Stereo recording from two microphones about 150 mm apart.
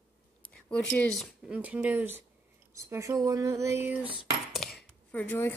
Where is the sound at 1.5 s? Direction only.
10° right (ahead or behind).